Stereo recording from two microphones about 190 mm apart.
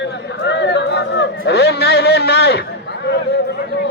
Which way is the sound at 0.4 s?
65° left (ahead or behind).